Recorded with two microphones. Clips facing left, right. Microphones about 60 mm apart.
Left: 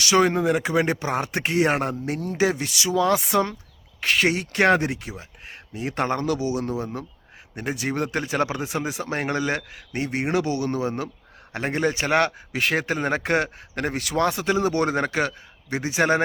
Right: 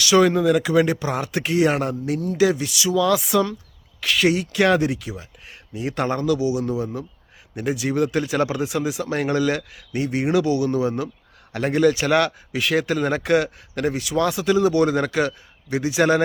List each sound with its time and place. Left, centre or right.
0.0 s speech: left